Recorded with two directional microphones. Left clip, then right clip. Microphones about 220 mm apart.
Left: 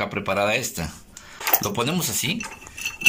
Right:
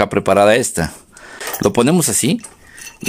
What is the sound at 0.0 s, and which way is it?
Speech, 55° right (ahead or behind).